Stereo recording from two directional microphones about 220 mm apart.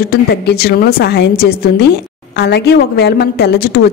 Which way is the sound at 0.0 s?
45° left (ahead or behind).